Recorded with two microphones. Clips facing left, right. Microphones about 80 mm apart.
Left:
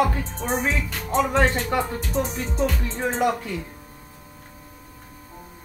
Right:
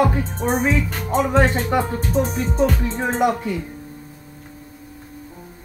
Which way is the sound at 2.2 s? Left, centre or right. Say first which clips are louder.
Right 5 dB; right.